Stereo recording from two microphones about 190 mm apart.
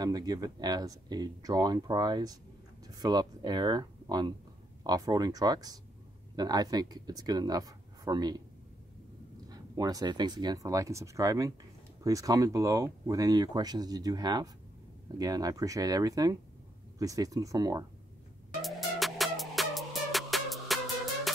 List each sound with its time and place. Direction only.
0.0 s speech: 20° right (ahead or behind)
9.5 s speech: 20° right (ahead or behind)
18.6 s music: centre (ahead or behind)